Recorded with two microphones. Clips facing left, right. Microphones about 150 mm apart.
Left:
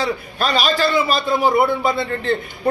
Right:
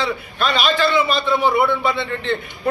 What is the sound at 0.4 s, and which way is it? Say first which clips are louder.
A man's voice: even; 40° left (ahead or behind).